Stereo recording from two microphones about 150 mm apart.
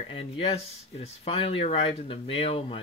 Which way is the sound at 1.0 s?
40° left (ahead or behind).